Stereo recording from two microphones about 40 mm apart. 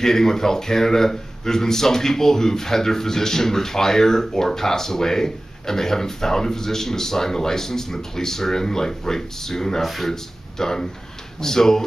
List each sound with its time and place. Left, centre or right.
0.0 s speech: centre